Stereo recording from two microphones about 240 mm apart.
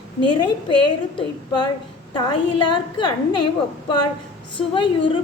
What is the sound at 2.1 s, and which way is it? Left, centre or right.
Speech, centre.